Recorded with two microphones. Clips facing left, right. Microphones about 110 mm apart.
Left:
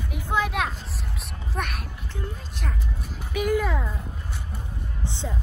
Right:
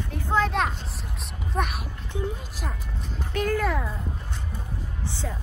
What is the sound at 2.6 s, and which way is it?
Music, 5° left (ahead or behind).